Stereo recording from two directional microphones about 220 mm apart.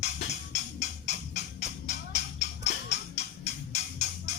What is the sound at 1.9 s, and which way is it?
Music, 30° left (ahead or behind).